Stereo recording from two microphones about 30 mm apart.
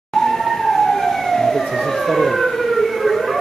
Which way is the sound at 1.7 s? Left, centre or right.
Centre.